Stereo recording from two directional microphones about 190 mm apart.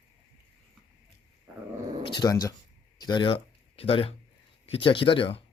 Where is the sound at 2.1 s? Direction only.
20° left (ahead or behind).